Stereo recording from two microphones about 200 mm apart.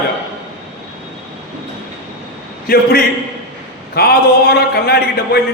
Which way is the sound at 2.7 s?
50° left (ahead or behind).